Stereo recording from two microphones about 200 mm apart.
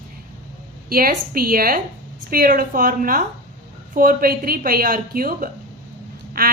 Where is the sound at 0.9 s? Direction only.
45° right (ahead or behind).